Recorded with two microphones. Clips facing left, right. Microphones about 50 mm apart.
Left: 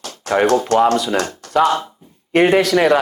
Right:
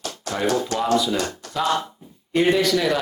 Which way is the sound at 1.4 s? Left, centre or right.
Left.